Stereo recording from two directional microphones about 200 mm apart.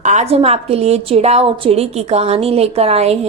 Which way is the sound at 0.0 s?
35° right (ahead or behind).